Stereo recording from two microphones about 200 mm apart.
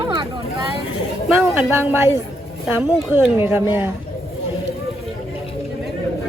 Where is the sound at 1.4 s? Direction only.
10° right (ahead or behind).